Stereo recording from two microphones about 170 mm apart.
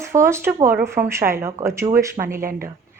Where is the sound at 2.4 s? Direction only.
55° right (ahead or behind).